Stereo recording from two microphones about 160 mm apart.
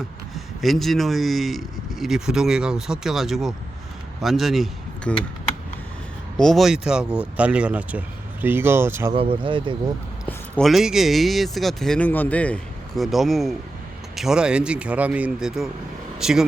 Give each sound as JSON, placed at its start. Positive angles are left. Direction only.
{"t": 0.3, "sound": "a man's voice", "side_deg": 0}
{"t": 6.3, "sound": "speech", "side_deg": 5}
{"t": 9.1, "sound": "speech", "side_deg": -30}
{"t": 10.2, "sound": "a man's voice", "side_deg": 5}